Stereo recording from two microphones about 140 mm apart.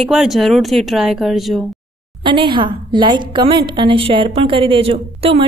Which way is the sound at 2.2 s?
35° right (ahead or behind).